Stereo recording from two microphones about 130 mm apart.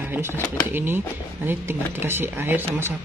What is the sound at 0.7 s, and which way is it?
Speech, 15° right (ahead or behind).